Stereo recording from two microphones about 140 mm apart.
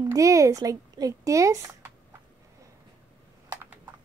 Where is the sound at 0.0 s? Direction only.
25° right (ahead or behind).